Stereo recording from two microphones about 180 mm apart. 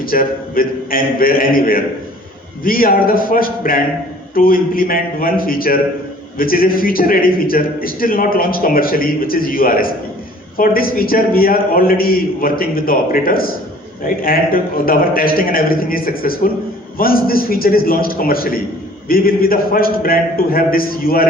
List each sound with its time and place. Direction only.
0.0 s a man's voice: 55° left (ahead or behind)